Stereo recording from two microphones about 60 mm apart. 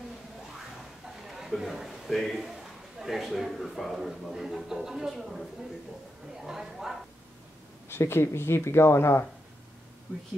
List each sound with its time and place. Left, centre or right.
1.0 s a sound: centre
1.5 s a man's voice: centre
7.9 s speech: left